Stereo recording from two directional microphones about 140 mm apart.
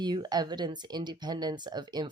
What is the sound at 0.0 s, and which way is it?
Speech, 30° right (ahead or behind).